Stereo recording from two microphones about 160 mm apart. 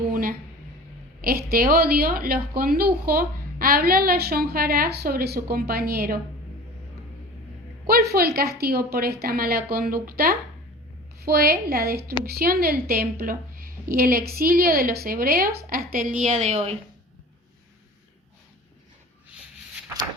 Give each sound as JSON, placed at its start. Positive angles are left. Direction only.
{"t": 0.1, "sound": "a sound", "side_deg": -65}
{"t": 1.2, "sound": "speech", "side_deg": -70}
{"t": 7.9, "sound": "a woman's voice", "side_deg": -70}